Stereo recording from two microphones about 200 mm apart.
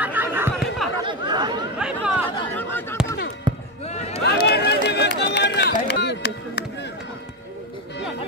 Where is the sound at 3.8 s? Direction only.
30° left (ahead or behind).